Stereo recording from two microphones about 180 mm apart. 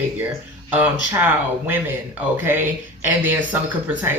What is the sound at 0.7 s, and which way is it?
Speech, 10° right (ahead or behind).